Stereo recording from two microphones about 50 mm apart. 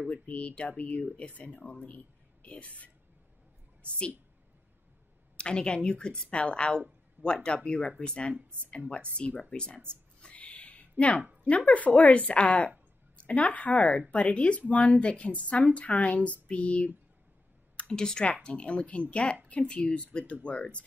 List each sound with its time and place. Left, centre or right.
0.1 s a woman's voice: left
5.4 s a woman's voice: centre
10.3 s a sound: left
11.4 s a woman's voice: left